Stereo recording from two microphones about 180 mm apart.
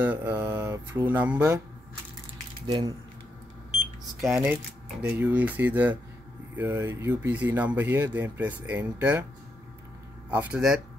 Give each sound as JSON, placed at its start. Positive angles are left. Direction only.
{"t": 0.0, "sound": "speech", "side_deg": -10}
{"t": 2.6, "sound": "speech", "side_deg": -25}
{"t": 4.2, "sound": "speech", "side_deg": -5}
{"t": 10.3, "sound": "speech", "side_deg": -5}